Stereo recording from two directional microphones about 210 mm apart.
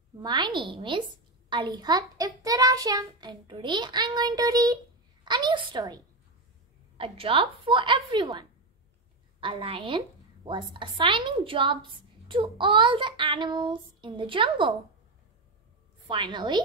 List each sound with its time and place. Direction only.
0.2 s a woman's voice: 20° right (ahead or behind)
1.5 s child singing: 20° right (ahead or behind)
5.2 s a woman's voice: 20° right (ahead or behind)
7.0 s a woman's voice: 25° right (ahead or behind)
16.1 s a woman's voice: 20° right (ahead or behind)